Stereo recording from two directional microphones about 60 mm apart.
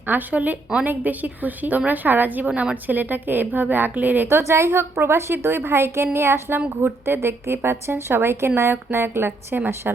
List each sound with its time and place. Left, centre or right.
0.1 s a woman's voice: right
4.3 s a woman's voice: right
9.9 s speech: right